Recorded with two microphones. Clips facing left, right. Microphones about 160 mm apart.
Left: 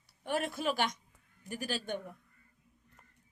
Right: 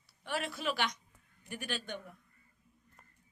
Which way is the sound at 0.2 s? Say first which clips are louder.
Left 4 dB; 45° left (ahead or behind).